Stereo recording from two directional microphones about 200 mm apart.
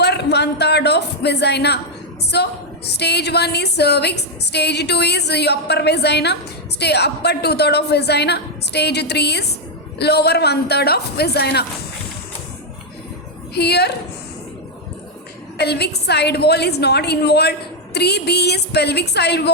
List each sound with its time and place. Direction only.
0.0 s a man's voice: 55° left (ahead or behind)
2.3 s music: 55° left (ahead or behind)
10.0 s a woman's voice: 55° left (ahead or behind)
13.5 s music: 55° left (ahead or behind)
15.5 s music: 55° left (ahead or behind)